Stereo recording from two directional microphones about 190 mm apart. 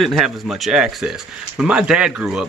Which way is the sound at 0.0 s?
Centre (ahead or behind).